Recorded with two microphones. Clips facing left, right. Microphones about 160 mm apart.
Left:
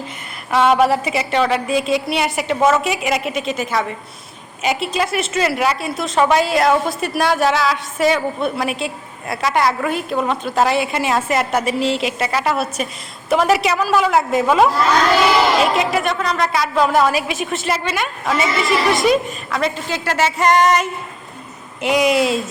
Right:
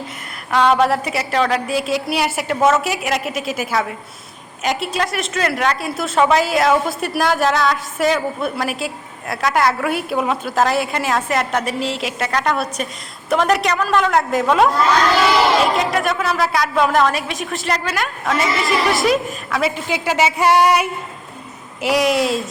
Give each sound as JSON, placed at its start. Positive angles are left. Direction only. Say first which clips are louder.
{"t": 0.5, "sound": "a woman's voice", "louder": "left 1 dB", "side_deg": 0}